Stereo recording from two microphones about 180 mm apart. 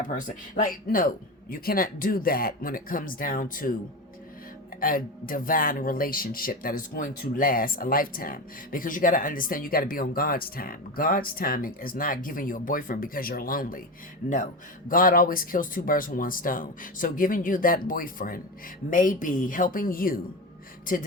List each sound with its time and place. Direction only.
0.0 s speech: 45° left (ahead or behind)
4.8 s speech: 50° left (ahead or behind)
14.8 s speech: 50° left (ahead or behind)